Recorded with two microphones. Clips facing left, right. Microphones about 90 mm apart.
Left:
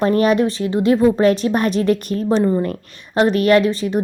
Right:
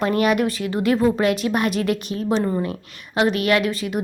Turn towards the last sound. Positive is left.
turn(degrees=35)  # may be behind; listen again after turning